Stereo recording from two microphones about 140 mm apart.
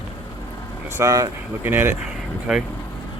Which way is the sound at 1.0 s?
25° right (ahead or behind).